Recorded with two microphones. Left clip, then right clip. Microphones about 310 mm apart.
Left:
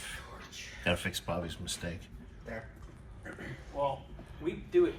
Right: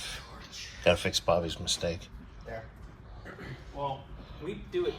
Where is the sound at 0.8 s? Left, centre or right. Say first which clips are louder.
Right 8 dB; centre.